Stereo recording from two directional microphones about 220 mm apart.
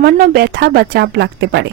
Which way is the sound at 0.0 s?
45° right (ahead or behind).